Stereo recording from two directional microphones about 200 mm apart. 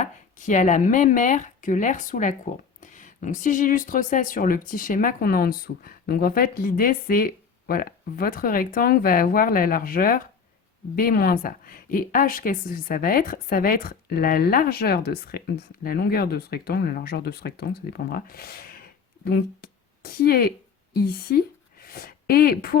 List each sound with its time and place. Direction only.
0.0 s a woman's voice: 40° left (ahead or behind)